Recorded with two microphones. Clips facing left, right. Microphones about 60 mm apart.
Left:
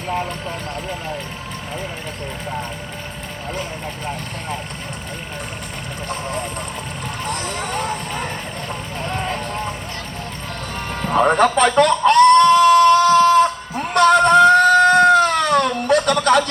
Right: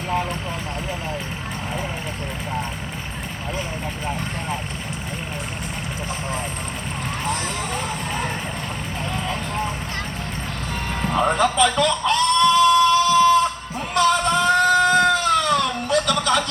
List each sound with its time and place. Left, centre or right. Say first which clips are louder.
4.0 s speech: right 2 dB; centre
7.5 s speech: left 3 dB; left
11.1 s chicken: left 5 dB; left
13.9 s a sound: left 7 dB; left